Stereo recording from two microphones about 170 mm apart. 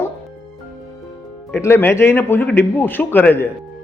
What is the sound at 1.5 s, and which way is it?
A man's voice, 15° left (ahead or behind).